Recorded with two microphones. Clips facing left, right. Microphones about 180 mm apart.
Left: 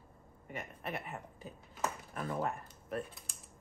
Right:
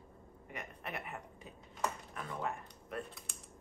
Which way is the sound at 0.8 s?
30° left (ahead or behind).